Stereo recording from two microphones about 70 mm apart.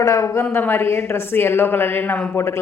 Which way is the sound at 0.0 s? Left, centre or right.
Left.